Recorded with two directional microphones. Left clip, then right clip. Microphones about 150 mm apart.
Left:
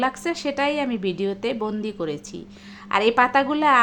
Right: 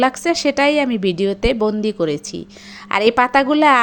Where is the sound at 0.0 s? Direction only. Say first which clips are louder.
Right 8 dB; 35° right (ahead or behind).